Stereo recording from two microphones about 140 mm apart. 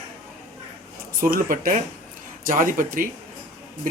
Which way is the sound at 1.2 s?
90° right.